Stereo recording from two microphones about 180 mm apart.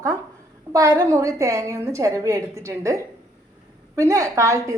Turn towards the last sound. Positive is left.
turn(degrees=-15)  # may be behind; listen again after turning